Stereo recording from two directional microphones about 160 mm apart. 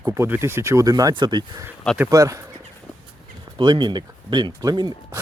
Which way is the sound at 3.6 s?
25° right (ahead or behind).